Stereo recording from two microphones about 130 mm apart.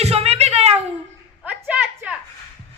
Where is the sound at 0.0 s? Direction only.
55° right (ahead or behind).